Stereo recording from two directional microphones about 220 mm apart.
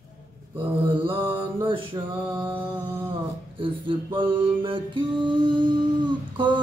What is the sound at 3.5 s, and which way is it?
Speech, 25° right (ahead or behind).